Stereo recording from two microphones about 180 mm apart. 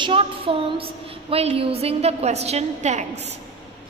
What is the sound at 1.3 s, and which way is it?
A woman's voice, 35° right (ahead or behind).